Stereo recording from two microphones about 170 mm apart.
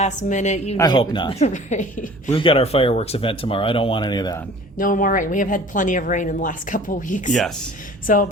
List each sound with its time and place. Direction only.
0.0 s a woman's voice: 45° left (ahead or behind)
0.8 s speech: 25° left (ahead or behind); by 2.3 s 45° left (ahead or behind)
2.3 s speech: 30° left (ahead or behind)
4.8 s a woman's voice: 50° left (ahead or behind)